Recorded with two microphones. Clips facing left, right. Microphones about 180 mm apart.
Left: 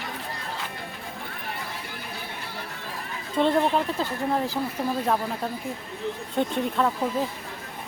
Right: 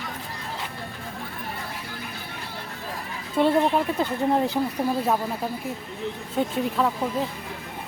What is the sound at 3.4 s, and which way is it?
Speech, 15° right (ahead or behind).